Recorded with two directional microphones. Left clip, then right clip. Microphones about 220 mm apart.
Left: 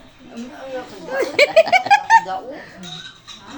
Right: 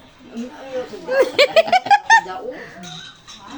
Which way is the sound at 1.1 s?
25° right (ahead or behind).